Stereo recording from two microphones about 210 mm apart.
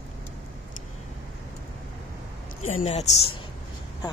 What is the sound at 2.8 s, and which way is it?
Speech, 30° left (ahead or behind).